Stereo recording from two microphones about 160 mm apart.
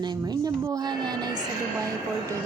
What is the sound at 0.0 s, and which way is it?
A woman's voice, 25° right (ahead or behind).